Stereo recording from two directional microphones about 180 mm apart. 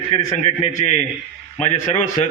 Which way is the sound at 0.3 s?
35° left (ahead or behind).